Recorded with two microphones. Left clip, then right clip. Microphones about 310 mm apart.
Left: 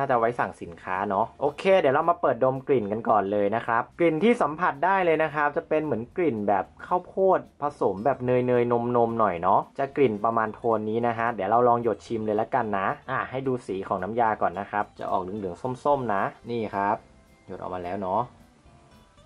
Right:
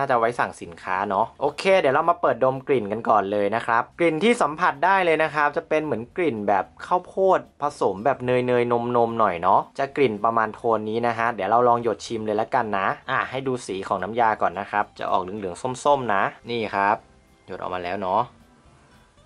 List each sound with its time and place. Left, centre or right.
0.0 s speech: centre
1.1 s speech: centre
1.5 s speech: centre
7.0 s speech: left